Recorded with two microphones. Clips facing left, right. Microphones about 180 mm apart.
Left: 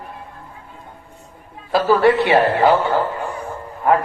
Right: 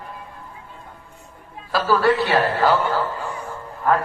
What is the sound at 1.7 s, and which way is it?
A man's voice, 20° left (ahead or behind).